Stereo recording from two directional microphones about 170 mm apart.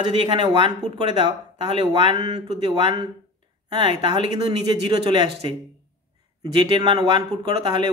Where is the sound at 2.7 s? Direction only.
25° right (ahead or behind).